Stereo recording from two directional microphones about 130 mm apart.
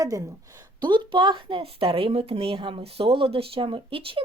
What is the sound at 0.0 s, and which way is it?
A woman's voice, 25° right (ahead or behind).